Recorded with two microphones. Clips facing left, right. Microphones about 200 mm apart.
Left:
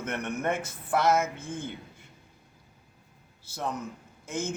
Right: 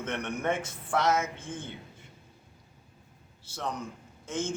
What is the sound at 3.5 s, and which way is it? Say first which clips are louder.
Speech: left 2 dB; 10° left (ahead or behind).